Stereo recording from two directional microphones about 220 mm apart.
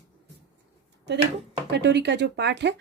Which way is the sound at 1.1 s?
50° right (ahead or behind).